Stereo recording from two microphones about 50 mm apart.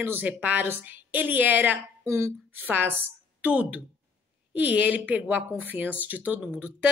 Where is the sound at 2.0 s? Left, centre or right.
Right.